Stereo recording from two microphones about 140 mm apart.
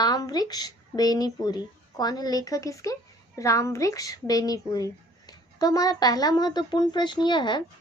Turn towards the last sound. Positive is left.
turn(degrees=35)  # may be behind; listen again after turning